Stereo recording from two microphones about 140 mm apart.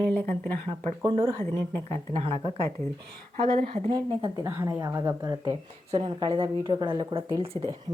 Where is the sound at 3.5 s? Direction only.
50° right (ahead or behind).